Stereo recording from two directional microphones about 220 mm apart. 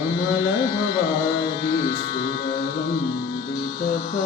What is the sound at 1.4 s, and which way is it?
Music, 20° left (ahead or behind).